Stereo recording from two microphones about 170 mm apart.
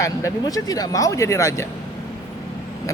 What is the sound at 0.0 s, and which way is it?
Speech, 20° left (ahead or behind).